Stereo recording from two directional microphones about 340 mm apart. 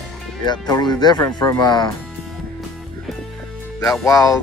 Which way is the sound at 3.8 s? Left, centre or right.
Centre.